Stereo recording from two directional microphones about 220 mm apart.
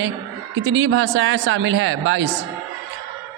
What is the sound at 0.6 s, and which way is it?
A man's voice, 60° right (ahead or behind).